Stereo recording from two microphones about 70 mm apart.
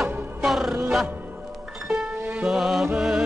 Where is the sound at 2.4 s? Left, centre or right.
Centre.